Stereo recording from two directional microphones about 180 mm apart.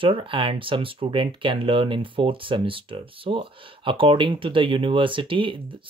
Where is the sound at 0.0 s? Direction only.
30° right (ahead or behind).